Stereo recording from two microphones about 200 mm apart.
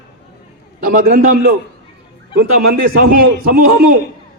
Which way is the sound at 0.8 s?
45° right (ahead or behind).